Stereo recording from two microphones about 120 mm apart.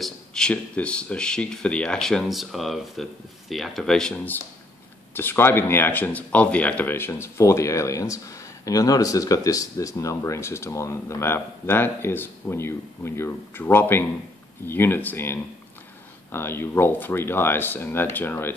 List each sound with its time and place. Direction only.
0.0 s speech: 5° left (ahead or behind)
5.1 s speech: 20° left (ahead or behind)